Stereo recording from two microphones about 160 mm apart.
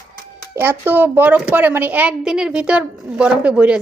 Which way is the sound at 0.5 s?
15° right (ahead or behind).